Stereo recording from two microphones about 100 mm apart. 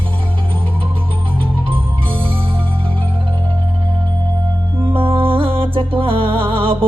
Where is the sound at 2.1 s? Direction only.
60° right (ahead or behind).